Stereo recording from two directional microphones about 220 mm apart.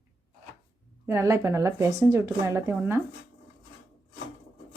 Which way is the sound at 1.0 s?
15° right (ahead or behind).